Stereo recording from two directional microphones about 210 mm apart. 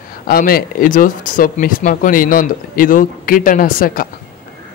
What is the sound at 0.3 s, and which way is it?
Speech, 45° left (ahead or behind).